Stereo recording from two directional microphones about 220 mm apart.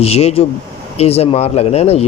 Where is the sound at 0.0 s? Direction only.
30° left (ahead or behind).